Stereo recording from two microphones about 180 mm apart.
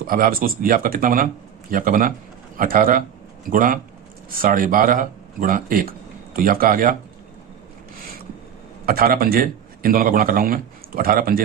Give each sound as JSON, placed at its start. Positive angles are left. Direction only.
{"t": 0.1, "sound": "a man's voice", "side_deg": -55}
{"t": 8.9, "sound": "a man's voice", "side_deg": -55}